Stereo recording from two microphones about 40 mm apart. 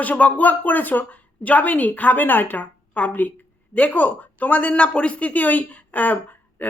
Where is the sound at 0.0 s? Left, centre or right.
Left.